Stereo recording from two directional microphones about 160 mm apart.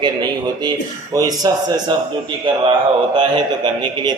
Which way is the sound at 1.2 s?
25° right (ahead or behind).